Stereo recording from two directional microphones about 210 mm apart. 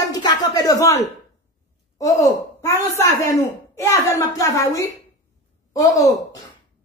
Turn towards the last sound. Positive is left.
turn(degrees=15)  # may be behind; listen again after turning